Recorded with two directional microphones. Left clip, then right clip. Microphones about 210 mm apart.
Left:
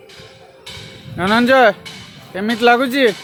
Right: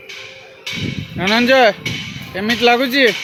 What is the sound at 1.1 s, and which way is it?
Speech, 5° left (ahead or behind).